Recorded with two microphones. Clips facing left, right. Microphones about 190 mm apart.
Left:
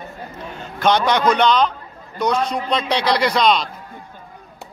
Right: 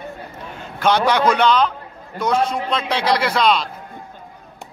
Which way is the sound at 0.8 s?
5° right (ahead or behind).